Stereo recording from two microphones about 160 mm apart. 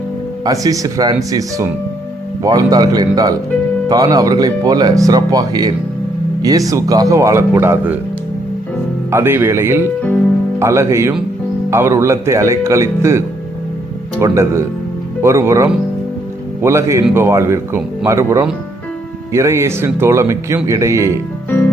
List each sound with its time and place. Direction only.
0.4 s speech: 20° right (ahead or behind)
9.0 s speech: 15° right (ahead or behind)